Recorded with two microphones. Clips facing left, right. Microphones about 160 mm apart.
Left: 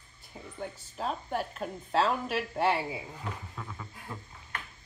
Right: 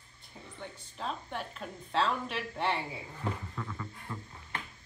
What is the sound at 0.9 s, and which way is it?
A woman's voice, 40° left (ahead or behind).